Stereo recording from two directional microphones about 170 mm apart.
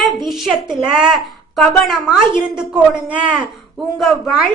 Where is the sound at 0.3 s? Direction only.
5° right (ahead or behind).